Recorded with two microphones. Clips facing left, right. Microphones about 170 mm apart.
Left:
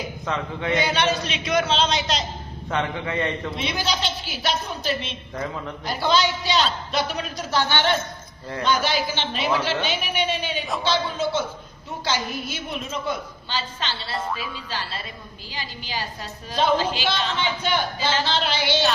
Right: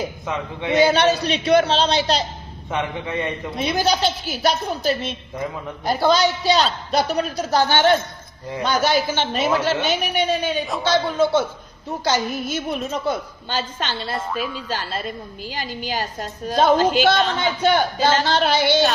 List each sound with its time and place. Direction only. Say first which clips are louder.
0.9 s speech: right 6 dB; 40° right (ahead or behind)
2.6 s a man's voice: right 1 dB; 15° right (ahead or behind)
3.6 s a woman's voice: right 9 dB; 45° right (ahead or behind)
14.2 s a woman's voice: right 1 dB; centre (ahead or behind)
14.7 s a woman's voice: right 6 dB; 45° right (ahead or behind)